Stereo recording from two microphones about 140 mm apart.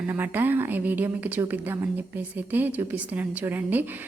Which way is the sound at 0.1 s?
15° right (ahead or behind).